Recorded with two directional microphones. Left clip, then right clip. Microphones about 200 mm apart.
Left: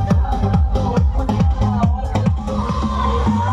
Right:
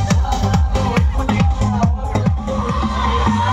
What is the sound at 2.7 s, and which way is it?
Music, 60° left (ahead or behind).